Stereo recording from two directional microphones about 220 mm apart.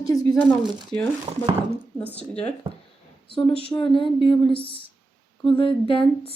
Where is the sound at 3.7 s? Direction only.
25° left (ahead or behind).